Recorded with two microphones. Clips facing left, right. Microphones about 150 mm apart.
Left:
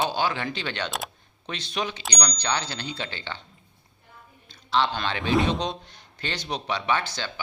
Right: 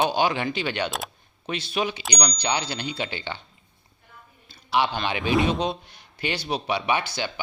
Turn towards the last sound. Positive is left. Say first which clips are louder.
# right 1 dB
turn(degrees=-10)  # may be behind; listen again after turning